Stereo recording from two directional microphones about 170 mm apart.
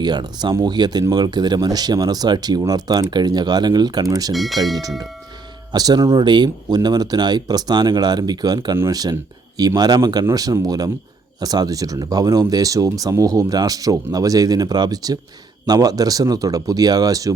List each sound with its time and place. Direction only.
0.0 s speech: 25° right (ahead or behind)
4.3 s speech: centre (ahead or behind)
4.8 s speech: 20° right (ahead or behind)